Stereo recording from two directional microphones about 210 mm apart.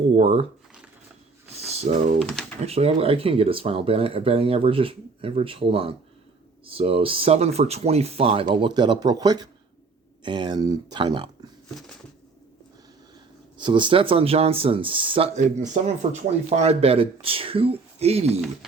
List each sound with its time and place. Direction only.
0.2 s speech: 30° right (ahead or behind)
1.6 s a sound: 30° right (ahead or behind)
2.6 s speech: 30° right (ahead or behind)
13.6 s speech: 20° right (ahead or behind)